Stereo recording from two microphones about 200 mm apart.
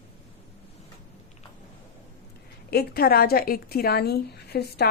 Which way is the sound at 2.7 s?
50° left (ahead or behind).